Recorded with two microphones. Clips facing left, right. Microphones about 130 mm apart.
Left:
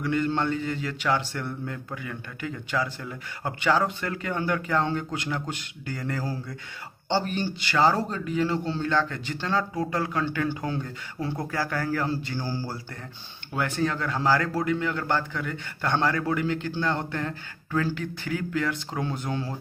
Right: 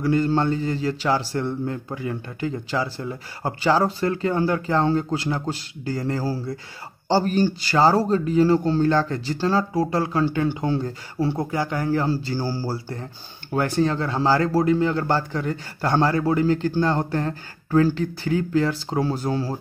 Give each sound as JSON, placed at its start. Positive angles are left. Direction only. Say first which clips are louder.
{"t": 0.0, "sound": "a man's voice", "louder": "right 5 dB", "side_deg": -35}